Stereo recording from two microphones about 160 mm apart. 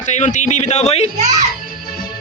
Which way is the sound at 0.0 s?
50° left (ahead or behind).